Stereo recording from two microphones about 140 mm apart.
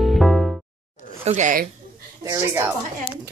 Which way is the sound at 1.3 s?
60° right (ahead or behind).